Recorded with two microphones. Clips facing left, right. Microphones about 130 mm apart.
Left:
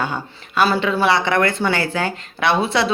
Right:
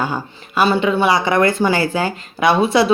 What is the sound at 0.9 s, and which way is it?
Speech, 20° right (ahead or behind).